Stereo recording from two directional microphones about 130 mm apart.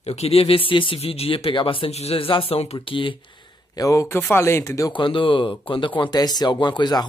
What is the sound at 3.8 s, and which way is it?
Speech, 25° left (ahead or behind).